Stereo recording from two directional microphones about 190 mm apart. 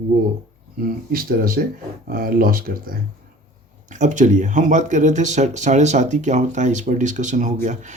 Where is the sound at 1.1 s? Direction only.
50° right (ahead or behind).